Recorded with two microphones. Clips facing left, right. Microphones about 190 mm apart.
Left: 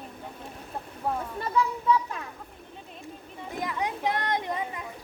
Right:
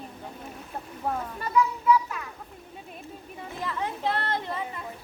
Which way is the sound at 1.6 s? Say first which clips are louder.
Right 2 dB; 30° left (ahead or behind).